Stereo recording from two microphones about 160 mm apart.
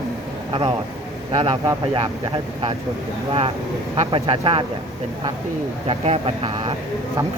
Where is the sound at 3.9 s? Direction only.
35° right (ahead or behind).